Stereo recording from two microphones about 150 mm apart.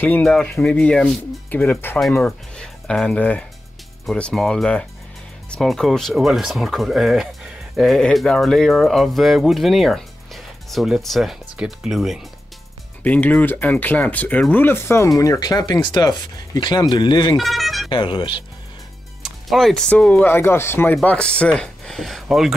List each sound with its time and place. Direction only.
0.0 s speech: 10° left (ahead or behind)
2.0 s speech: centre (ahead or behind)
13.0 s speech: 10° left (ahead or behind); by 17.4 s 30° left (ahead or behind)
17.4 s vehicle: centre (ahead or behind)
17.8 s speech: 30° left (ahead or behind)
19.2 s speech: centre (ahead or behind)